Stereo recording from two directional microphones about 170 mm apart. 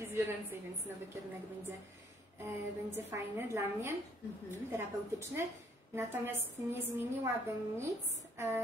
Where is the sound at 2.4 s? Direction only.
15° right (ahead or behind).